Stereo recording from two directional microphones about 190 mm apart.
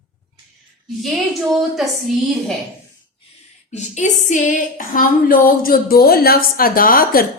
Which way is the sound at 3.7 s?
40° left (ahead or behind).